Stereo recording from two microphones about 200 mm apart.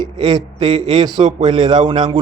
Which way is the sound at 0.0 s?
20° right (ahead or behind).